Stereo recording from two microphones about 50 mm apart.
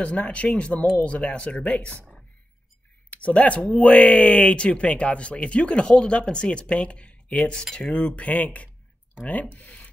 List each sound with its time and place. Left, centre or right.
0.0 s speech: left
3.1 s speech: left
7.7 s speech: centre
8.2 s speech: left